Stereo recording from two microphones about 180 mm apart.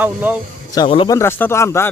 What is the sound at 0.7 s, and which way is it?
Speech, 25° left (ahead or behind).